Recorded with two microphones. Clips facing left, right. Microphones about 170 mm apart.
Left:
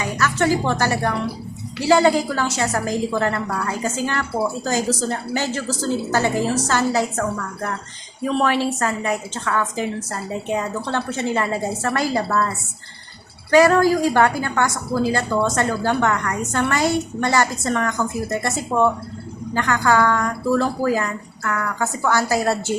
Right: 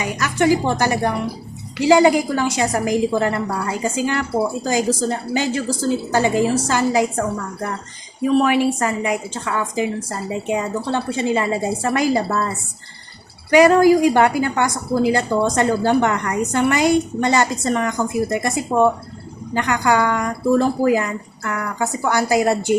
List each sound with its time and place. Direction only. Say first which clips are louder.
0.0 s a woman's voice: right 2 dB; 15° right (ahead or behind)
13.5 s a woman's voice: right 3 dB; 15° right (ahead or behind)